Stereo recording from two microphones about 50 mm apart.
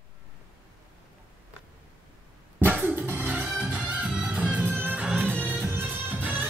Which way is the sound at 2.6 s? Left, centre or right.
Right.